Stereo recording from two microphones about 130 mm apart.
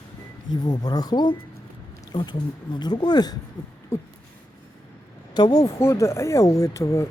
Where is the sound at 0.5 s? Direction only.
30° left (ahead or behind).